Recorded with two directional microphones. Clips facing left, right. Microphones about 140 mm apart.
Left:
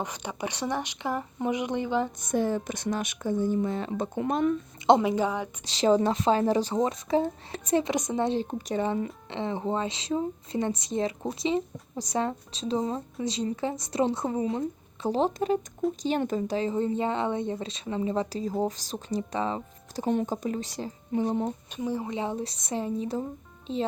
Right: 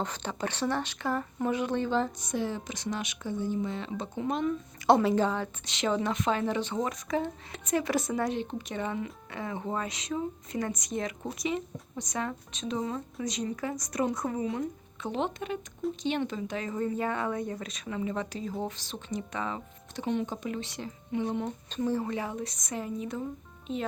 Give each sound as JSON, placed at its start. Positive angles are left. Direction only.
{"t": 0.0, "sound": "speech", "side_deg": 10}
{"t": 2.2, "sound": "speech", "side_deg": 50}
{"t": 4.9, "sound": "speech", "side_deg": 15}
{"t": 5.6, "sound": "speech", "side_deg": 35}
{"t": 8.4, "sound": "speech", "side_deg": 40}
{"t": 16.6, "sound": "speech", "side_deg": 30}
{"t": 21.7, "sound": "speech", "side_deg": 15}